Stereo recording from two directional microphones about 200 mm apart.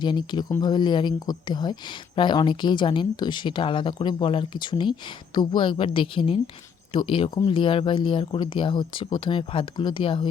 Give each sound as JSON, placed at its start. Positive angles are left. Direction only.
{"t": 0.0, "sound": "speech", "side_deg": 20}